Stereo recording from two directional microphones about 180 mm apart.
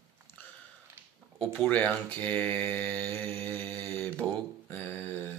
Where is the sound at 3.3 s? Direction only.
30° right (ahead or behind).